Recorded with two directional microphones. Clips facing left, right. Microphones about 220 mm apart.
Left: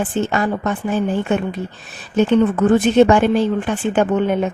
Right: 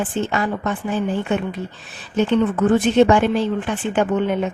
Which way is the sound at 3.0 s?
45° left (ahead or behind).